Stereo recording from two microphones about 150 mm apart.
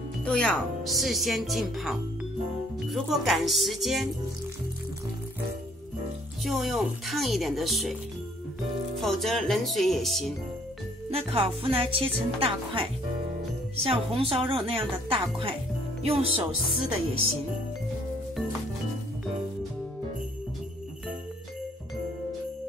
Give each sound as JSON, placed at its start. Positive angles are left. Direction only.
{"t": 0.2, "sound": "speech", "side_deg": 5}
{"t": 6.4, "sound": "speech", "side_deg": 0}
{"t": 8.9, "sound": "speech", "side_deg": 0}
{"t": 11.1, "sound": "speech", "side_deg": -40}